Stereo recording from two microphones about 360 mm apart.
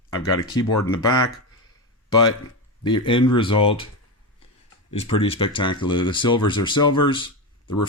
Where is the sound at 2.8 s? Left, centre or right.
Centre.